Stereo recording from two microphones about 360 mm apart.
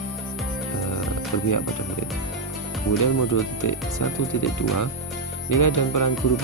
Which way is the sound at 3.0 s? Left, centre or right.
Left.